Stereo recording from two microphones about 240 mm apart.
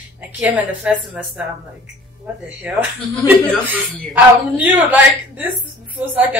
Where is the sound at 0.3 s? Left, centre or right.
Centre.